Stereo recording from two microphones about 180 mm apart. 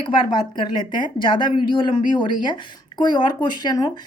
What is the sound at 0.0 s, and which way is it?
Speech, 25° left (ahead or behind).